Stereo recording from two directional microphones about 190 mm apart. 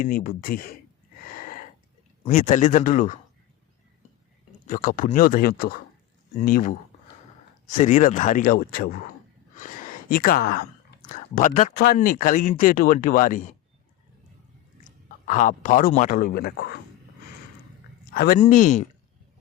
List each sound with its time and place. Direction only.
0.0 s speech: 50° left (ahead or behind)
1.3 s a sound: 45° left (ahead or behind)
2.2 s speech: 40° left (ahead or behind)
4.6 s speech: 45° left (ahead or behind)
15.3 s speech: 40° left (ahead or behind); by 16.8 s 60° left (ahead or behind)
18.0 s speech: 50° left (ahead or behind)